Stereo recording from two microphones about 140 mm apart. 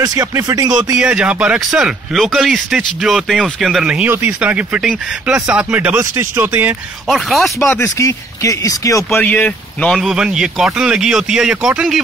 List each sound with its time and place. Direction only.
0.0 s speech: 25° right (ahead or behind)
0.9 s speech: 5° right (ahead or behind)
7.1 s speech: centre (ahead or behind)
7.7 s speech: 20° left (ahead or behind)
9.2 s speech: 10° left (ahead or behind)